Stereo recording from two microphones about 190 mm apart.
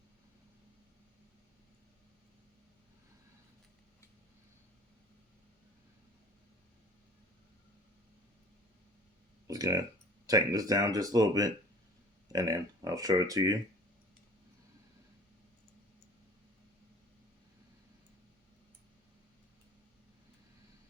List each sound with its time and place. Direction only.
9.5 s speech: 20° right (ahead or behind)